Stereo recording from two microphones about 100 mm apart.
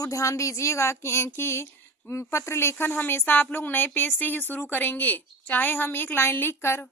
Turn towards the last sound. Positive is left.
turn(degrees=25)  # may be behind; listen again after turning